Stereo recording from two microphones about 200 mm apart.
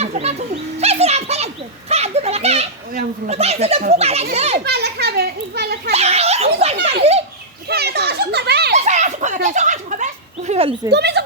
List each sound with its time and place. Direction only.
0.0 s bird: 30° right (ahead or behind)
1.9 s children playing: 30° right (ahead or behind)
3.2 s speech: 30° right (ahead or behind)
4.6 s children playing: 55° right (ahead or behind)
5.9 s giggle: 30° right (ahead or behind)
7.0 s children playing: 30° right (ahead or behind)
7.7 s children playing: 55° right (ahead or behind)
8.7 s a sound: 35° right (ahead or behind)
10.9 s speech: 55° right (ahead or behind)